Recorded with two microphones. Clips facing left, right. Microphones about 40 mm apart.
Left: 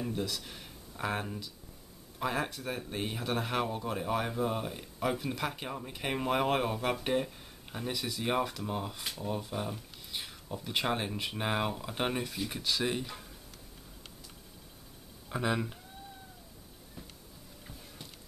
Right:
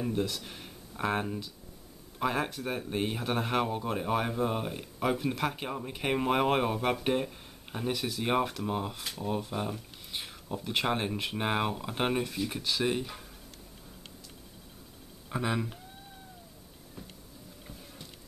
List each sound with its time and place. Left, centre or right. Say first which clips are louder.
0.0 s speech: right 4 dB; centre
8.9 s speech: right 2 dB; centre
9.4 s speech: right 3 dB; centre
15.2 s speech: even; centre